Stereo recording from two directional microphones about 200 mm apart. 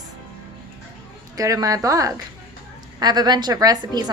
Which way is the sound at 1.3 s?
15° right (ahead or behind).